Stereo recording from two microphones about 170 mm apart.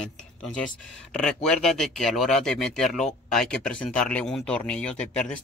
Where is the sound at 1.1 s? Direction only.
5° left (ahead or behind).